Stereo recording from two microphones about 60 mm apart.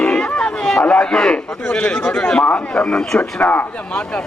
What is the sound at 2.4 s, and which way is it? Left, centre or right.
Speech, left.